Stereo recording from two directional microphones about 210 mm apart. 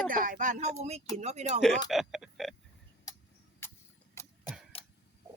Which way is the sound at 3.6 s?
10° left (ahead or behind).